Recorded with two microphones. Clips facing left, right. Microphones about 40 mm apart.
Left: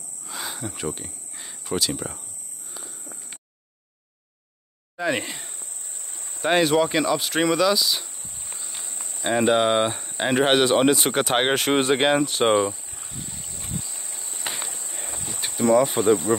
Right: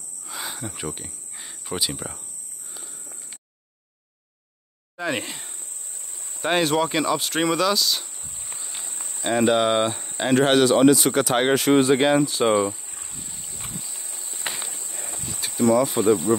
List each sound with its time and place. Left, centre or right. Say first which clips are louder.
0.2 s cricket: even; centre
2.0 s speech: left 2 dB; left
4.9 s speech: left 2 dB; centre
8.5 s walk: even; right
8.9 s a sound: even; right
9.2 s speech: even; centre
10.1 s speech: right 1 dB; centre; by 12.5 s left
13.3 s boat: left 1 dB; centre
13.8 s a sound: left 1 dB; centre
14.1 s a sound: left 1 dB; left
14.5 s walk: left 1 dB; left
15.7 s speech: left 3 dB; left
16.3 s speech: right 1 dB; left